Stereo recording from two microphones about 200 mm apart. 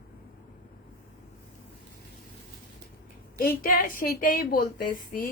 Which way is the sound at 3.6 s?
45° left (ahead or behind).